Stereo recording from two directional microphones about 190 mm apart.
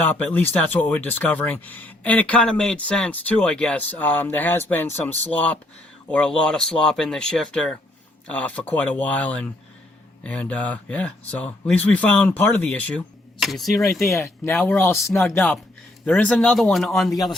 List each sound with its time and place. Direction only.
0.0 s speech: 10° left (ahead or behind)
14.1 s speech: 15° left (ahead or behind)
16.0 s speech: 5° left (ahead or behind)